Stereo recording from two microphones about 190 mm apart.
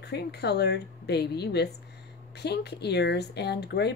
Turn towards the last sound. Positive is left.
turn(degrees=60)  # may be behind; listen again after turning